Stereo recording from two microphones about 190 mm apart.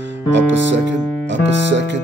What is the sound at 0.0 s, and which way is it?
Music, 70° right (ahead or behind).